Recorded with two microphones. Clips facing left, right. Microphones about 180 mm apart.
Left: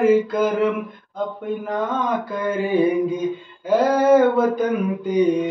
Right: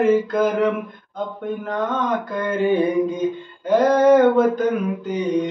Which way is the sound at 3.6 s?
10° left (ahead or behind).